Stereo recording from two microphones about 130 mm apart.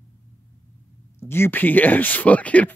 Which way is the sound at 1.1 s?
20° left (ahead or behind).